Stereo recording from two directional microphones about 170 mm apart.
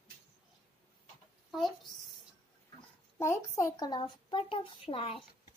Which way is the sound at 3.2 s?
20° left (ahead or behind).